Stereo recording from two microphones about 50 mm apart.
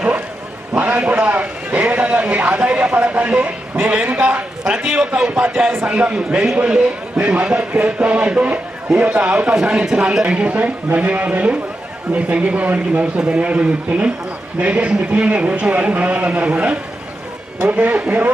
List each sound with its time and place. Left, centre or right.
0.8 s a man's voice: right
9.6 s a man's voice: centre
17.6 s speech: right